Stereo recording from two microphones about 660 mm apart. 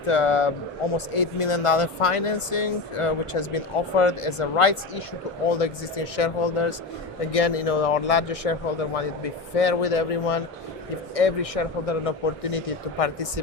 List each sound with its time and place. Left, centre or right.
0.0 s speech: left
7.3 s speech: left
9.6 s speech: left